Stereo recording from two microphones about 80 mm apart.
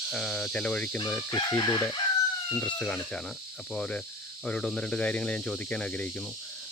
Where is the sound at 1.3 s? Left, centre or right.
Left.